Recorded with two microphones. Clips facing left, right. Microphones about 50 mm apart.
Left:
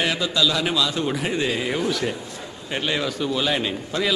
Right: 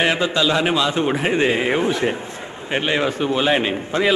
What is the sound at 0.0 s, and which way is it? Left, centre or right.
A man's voice, right.